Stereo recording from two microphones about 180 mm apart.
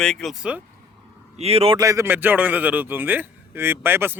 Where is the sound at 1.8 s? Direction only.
15° right (ahead or behind).